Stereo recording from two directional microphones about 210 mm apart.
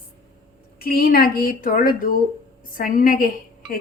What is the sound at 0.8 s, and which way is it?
A woman's voice, 45° left (ahead or behind).